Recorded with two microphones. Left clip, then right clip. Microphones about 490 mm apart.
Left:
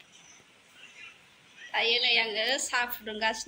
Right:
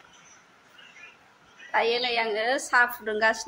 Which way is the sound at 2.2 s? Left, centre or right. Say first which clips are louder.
Right 2 dB; left.